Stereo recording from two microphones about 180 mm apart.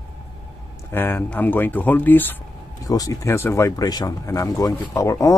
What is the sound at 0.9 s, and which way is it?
Speech, 10° left (ahead or behind).